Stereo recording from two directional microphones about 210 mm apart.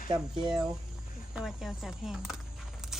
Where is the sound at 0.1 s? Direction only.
20° right (ahead or behind).